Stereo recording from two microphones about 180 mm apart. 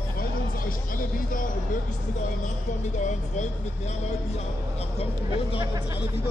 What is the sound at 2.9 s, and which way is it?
Speech, 40° left (ahead or behind).